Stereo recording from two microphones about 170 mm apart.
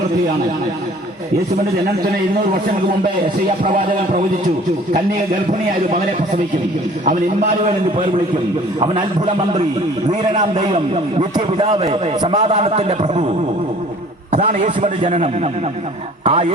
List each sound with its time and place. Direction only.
7.6 s a man's voice: 35° right (ahead or behind)
10.1 s a man's voice: 40° right (ahead or behind)
14.3 s a man's voice: 40° right (ahead or behind)